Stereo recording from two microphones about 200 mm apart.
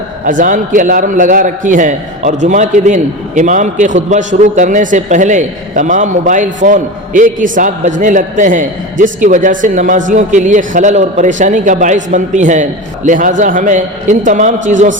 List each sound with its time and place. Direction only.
0.3 s a man's voice: 40° right (ahead or behind)